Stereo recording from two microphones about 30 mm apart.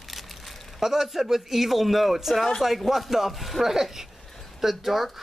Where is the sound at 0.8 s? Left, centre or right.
Centre.